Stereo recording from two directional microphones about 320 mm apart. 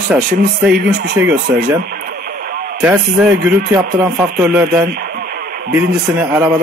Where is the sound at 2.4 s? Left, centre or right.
Right.